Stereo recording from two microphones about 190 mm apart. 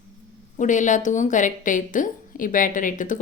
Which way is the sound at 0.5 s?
40° left (ahead or behind).